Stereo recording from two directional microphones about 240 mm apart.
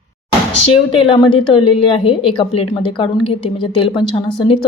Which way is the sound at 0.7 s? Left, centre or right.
Left.